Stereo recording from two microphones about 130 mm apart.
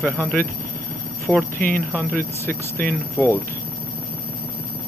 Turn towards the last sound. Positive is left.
turn(degrees=15)  # may be behind; listen again after turning